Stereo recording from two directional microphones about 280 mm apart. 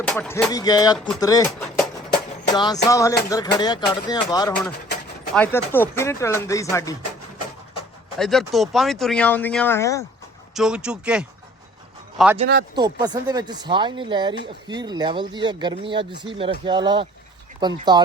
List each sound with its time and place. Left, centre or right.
0.0 s speech: centre
0.9 s speech: centre
1.2 s speech: centre
2.5 s speech: centre
8.2 s speech: centre
10.5 s speech: centre
12.4 s speech: right
12.7 s speech: centre